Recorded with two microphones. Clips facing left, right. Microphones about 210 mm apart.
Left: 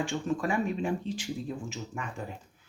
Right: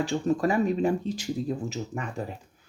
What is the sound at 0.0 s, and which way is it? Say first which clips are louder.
Speech: right 5 dB; 35° right (ahead or behind).